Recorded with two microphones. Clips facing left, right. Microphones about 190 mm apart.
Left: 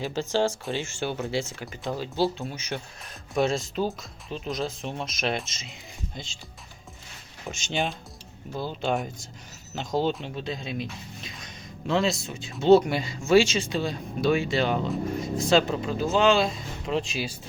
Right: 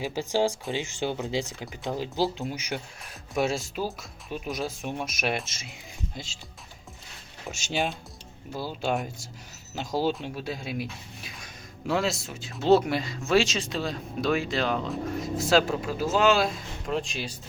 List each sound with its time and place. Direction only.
0.0 s speech: 10° right (ahead or behind)
7.4 s speech: 5° right (ahead or behind)